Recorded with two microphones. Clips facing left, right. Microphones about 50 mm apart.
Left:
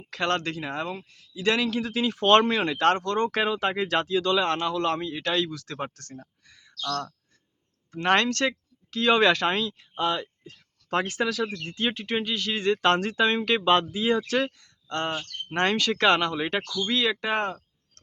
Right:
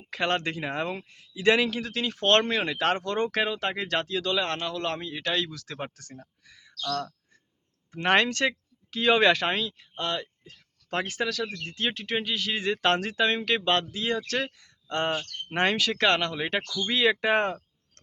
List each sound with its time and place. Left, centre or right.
0.1 s a man's voice: centre
1.7 s speech: centre
3.3 s speech: centre
14.6 s speech: centre